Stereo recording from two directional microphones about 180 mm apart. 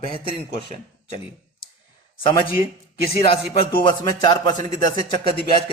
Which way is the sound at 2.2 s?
30° left (ahead or behind).